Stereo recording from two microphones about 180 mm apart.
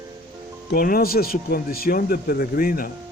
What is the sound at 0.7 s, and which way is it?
A man's voice, 55° left (ahead or behind).